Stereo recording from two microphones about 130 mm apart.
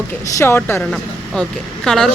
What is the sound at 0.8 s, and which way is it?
Speech, 5° left (ahead or behind).